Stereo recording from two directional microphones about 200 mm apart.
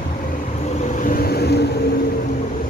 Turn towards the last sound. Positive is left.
turn(degrees=55)  # may be behind; listen again after turning